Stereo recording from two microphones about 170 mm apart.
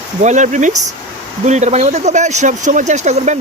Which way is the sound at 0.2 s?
45° right (ahead or behind).